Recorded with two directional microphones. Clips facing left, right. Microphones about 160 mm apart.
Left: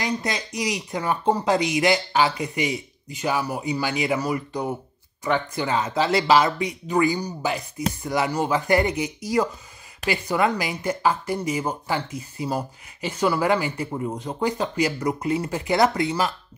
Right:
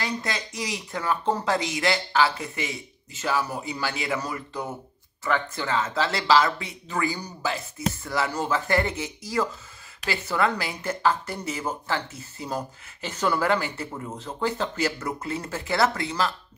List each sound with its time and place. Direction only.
0.0 s speech: 20° left (ahead or behind)